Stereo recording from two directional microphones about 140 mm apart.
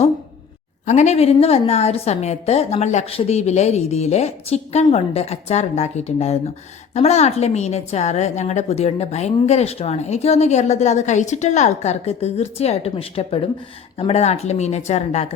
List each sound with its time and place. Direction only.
0.9 s a woman's voice: 55° left (ahead or behind)